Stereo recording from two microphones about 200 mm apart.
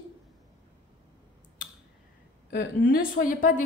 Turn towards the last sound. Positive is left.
turn(degrees=45)  # may be behind; listen again after turning